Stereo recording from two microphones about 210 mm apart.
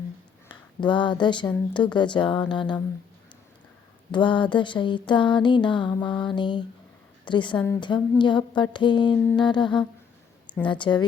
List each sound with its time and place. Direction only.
0.4 s speech: 20° left (ahead or behind)
4.1 s speech: 20° left (ahead or behind)